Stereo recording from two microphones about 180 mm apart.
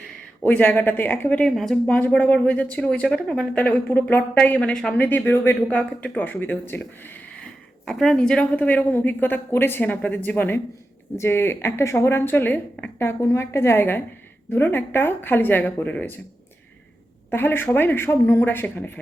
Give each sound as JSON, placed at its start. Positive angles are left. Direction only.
{"t": 0.4, "sound": "speech", "side_deg": 10}
{"t": 17.3, "sound": "speech", "side_deg": 10}